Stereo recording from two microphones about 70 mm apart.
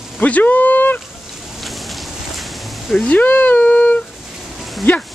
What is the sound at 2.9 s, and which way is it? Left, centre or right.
Speech, centre.